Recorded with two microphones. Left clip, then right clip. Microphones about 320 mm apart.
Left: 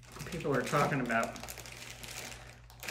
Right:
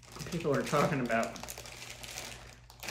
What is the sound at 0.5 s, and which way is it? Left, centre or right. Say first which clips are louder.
Speech: right 1 dB; centre.